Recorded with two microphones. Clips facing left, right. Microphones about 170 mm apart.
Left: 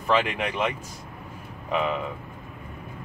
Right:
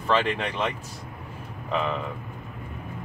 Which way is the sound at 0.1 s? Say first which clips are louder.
Even; 10° left (ahead or behind).